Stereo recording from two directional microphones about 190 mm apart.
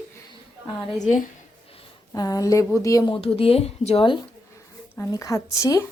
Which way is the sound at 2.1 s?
20° left (ahead or behind).